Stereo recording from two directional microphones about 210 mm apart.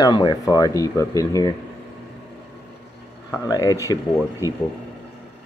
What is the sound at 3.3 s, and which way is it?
Speech, 15° left (ahead or behind).